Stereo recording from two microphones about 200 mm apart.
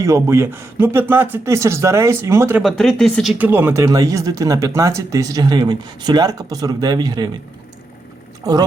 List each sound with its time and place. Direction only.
0.0 s speech: 15° right (ahead or behind)
2.6 s speech: centre (ahead or behind)
3.3 s speech: 10° right (ahead or behind)
8.4 s speech: 15° right (ahead or behind)